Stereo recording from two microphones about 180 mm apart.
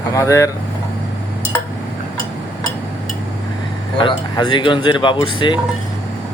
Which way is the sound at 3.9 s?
25° left (ahead or behind).